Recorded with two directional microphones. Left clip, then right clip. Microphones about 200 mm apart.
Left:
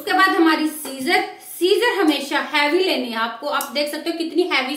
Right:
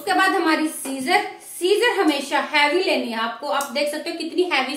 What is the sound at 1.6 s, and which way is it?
A woman's voice, 15° left (ahead or behind).